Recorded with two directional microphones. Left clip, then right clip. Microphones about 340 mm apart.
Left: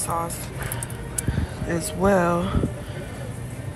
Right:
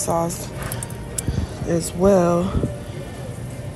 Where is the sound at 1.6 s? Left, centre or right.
Centre.